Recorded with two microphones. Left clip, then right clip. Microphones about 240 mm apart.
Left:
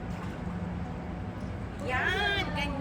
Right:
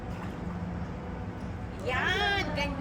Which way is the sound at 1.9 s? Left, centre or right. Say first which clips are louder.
Right 1 dB; right.